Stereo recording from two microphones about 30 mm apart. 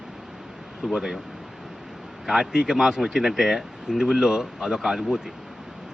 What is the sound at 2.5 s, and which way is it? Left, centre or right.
Speech, right.